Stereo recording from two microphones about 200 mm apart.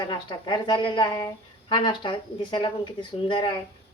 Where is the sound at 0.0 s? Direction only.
25° left (ahead or behind).